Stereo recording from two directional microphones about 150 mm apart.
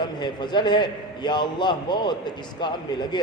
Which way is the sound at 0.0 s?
30° left (ahead or behind).